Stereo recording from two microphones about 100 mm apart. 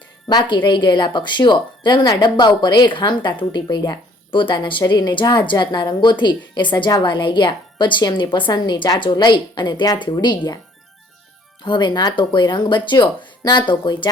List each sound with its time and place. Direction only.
0.3 s a woman's voice: 50° left (ahead or behind)
11.6 s a woman's voice: 55° left (ahead or behind)